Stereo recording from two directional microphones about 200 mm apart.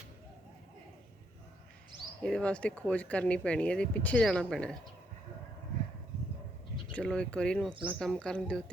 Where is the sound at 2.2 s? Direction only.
5° left (ahead or behind).